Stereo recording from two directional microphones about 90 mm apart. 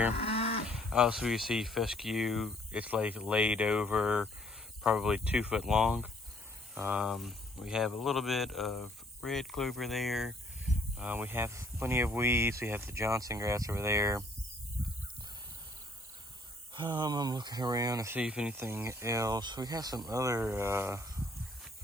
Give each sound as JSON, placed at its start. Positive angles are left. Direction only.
{"t": 0.2, "sound": "livestock", "side_deg": 90}
{"t": 0.7, "sound": "speech", "side_deg": -5}
{"t": 2.7, "sound": "speech", "side_deg": -15}
{"t": 10.9, "sound": "speech", "side_deg": -15}
{"t": 16.7, "sound": "speech", "side_deg": -60}
{"t": 18.2, "sound": "speech", "side_deg": -10}
{"t": 18.5, "sound": "speech", "side_deg": -25}
{"t": 20.4, "sound": "speech", "side_deg": -25}